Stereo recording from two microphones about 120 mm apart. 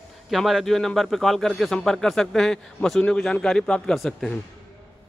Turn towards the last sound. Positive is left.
turn(degrees=0)  # may be behind; listen again after turning